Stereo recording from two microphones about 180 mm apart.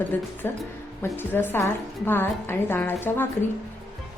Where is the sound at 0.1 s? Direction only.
10° left (ahead or behind).